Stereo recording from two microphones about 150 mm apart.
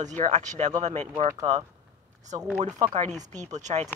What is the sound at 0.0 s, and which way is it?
Speech, 50° right (ahead or behind).